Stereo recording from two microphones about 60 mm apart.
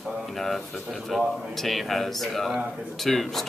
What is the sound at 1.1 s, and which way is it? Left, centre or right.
Speech, centre.